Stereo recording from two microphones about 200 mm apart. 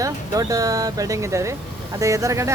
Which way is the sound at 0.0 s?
15° right (ahead or behind).